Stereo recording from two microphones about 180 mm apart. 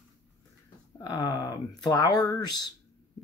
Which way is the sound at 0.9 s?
20° left (ahead or behind).